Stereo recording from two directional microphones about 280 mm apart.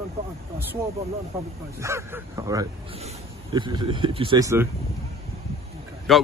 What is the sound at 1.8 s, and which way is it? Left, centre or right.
Speech, centre.